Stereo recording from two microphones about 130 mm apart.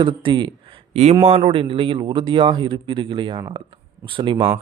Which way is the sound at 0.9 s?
55° right (ahead or behind).